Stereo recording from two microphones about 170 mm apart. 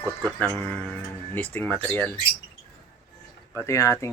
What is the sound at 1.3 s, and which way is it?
Speech, 10° left (ahead or behind).